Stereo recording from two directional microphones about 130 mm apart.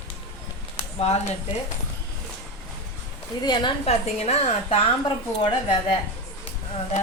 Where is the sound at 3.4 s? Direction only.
35° left (ahead or behind).